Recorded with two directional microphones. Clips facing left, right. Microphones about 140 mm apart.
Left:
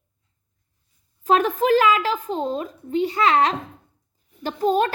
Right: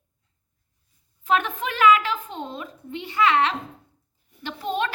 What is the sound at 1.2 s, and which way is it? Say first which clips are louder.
A woman's voice: left 5 dB; 40° left (ahead or behind).